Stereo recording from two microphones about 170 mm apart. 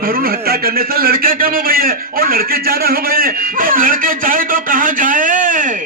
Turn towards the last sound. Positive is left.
turn(degrees=-50)  # may be behind; listen again after turning